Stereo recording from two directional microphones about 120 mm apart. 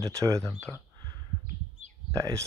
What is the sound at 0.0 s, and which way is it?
Speech, 25° right (ahead or behind).